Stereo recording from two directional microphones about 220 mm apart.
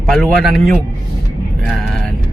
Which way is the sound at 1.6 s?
Centre (ahead or behind).